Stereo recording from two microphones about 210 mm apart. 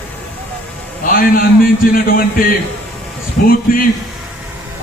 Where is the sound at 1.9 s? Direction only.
45° left (ahead or behind).